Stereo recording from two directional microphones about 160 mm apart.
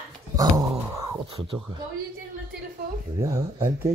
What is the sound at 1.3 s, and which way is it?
Speech, 35° right (ahead or behind).